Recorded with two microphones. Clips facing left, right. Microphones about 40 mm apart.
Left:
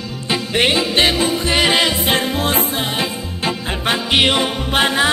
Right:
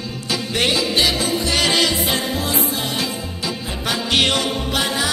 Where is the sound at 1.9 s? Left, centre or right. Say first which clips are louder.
Left 3 dB; left.